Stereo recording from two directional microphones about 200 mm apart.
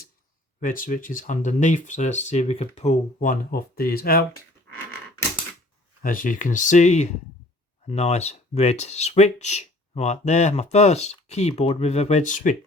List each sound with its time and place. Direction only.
0.6 s speech: 45° left (ahead or behind)
6.0 s speech: 45° left (ahead or behind)